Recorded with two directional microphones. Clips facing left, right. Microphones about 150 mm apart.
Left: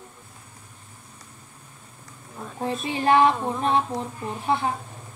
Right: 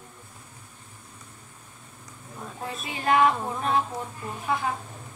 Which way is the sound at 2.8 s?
30° left (ahead or behind).